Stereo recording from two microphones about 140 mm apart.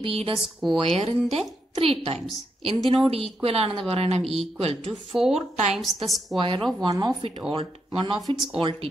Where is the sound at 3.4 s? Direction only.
45° right (ahead or behind).